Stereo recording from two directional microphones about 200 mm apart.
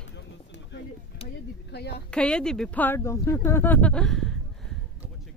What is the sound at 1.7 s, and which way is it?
Speech, 55° left (ahead or behind).